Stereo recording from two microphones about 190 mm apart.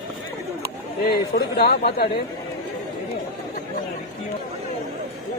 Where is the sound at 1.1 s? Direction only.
55° left (ahead or behind).